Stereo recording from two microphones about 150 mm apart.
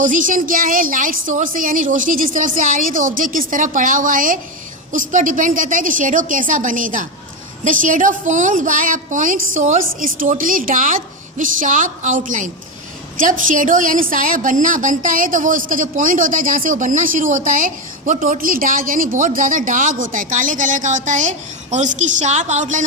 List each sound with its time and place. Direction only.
0.0 s a woman's voice: 60° right (ahead or behind)